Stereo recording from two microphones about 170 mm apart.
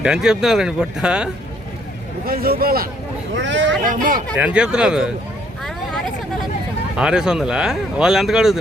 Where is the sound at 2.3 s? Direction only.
60° right (ahead or behind).